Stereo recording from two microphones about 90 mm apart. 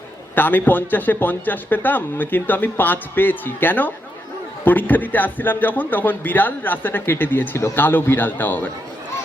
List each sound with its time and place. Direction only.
0.3 s a man's voice: 20° left (ahead or behind)